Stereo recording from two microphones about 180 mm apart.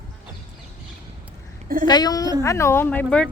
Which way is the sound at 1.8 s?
20° left (ahead or behind).